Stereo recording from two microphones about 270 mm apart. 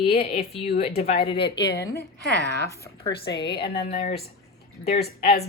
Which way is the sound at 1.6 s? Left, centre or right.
Left.